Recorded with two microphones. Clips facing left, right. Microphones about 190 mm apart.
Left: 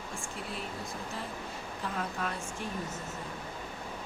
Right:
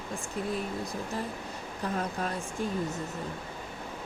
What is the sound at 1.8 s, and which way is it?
Speech, 40° right (ahead or behind).